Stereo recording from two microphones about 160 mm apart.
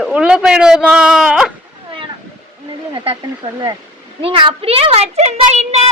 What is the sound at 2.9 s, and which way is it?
Speech, 35° right (ahead or behind).